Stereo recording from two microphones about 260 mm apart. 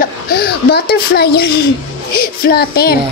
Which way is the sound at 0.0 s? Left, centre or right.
Left.